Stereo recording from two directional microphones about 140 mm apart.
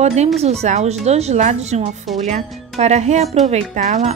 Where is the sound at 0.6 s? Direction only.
55° right (ahead or behind).